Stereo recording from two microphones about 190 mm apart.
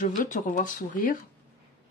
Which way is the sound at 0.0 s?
45° left (ahead or behind).